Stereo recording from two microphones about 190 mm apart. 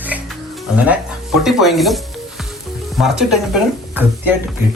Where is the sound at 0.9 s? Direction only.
Centre (ahead or behind).